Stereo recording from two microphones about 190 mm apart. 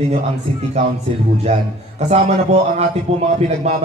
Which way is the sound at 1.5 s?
35° right (ahead or behind).